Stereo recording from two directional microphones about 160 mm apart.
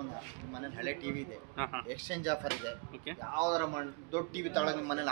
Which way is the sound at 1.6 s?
5° right (ahead or behind).